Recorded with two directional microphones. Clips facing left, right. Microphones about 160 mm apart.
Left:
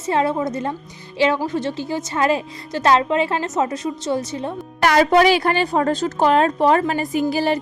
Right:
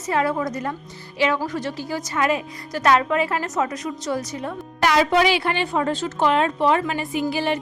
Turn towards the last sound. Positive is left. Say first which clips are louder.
# left 4 dB
turn(degrees=40)  # may be behind; listen again after turning